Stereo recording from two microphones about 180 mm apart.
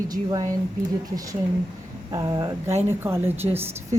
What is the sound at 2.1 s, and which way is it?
A woman's voice, 20° right (ahead or behind).